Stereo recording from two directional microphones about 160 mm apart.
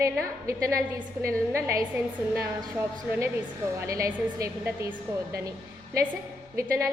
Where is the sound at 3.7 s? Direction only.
20° right (ahead or behind).